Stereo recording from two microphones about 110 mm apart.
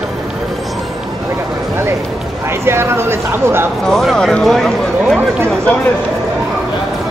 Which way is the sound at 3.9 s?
5° left (ahead or behind).